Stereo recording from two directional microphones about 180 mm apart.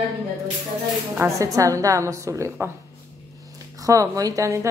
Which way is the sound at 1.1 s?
15° right (ahead or behind).